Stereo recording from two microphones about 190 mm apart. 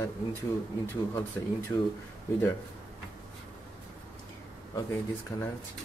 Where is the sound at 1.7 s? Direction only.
20° left (ahead or behind).